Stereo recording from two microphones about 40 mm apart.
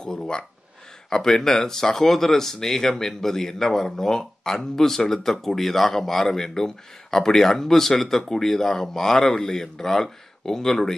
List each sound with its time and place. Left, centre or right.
0.0 s speech: centre